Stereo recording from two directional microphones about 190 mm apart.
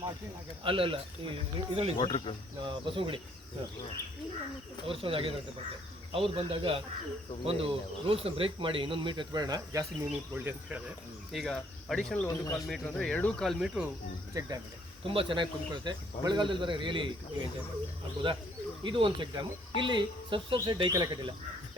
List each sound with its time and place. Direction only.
0.6 s speech: 25° right (ahead or behind)
2.0 s speech: 25° left (ahead or behind)
2.6 s speech: 25° right (ahead or behind)
4.9 s speech: 30° right (ahead or behind)
10.1 s cricket: 10° right (ahead or behind)
11.3 s speech: centre (ahead or behind)
12.3 s speech: 20° left (ahead or behind)
12.6 s speech: 5° left (ahead or behind)
14.3 s speech: 20° right (ahead or behind)
18.8 s speech: 25° right (ahead or behind)